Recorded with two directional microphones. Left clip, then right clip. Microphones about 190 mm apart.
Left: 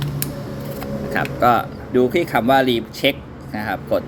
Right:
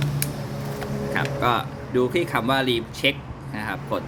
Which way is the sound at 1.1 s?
5° left (ahead or behind).